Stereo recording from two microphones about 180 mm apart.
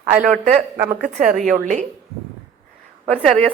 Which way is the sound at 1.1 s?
45° right (ahead or behind).